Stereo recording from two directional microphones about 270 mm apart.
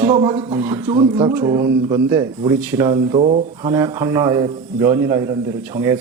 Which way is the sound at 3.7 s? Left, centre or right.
Centre.